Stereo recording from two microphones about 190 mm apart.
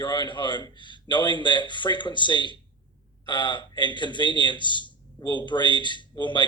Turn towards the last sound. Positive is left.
turn(degrees=25)  # may be behind; listen again after turning